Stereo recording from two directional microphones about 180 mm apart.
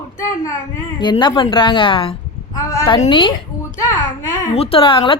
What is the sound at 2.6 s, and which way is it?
Speech, 15° left (ahead or behind).